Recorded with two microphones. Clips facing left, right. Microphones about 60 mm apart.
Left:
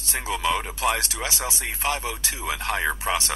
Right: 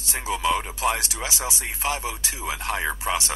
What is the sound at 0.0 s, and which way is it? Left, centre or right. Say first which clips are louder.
Speech: right 1 dB; left.